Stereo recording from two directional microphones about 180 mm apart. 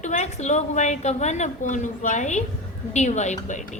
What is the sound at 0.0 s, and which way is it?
A woman's voice, 40° left (ahead or behind).